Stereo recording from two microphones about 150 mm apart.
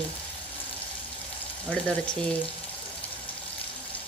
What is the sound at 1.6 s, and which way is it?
Speech, 5° left (ahead or behind).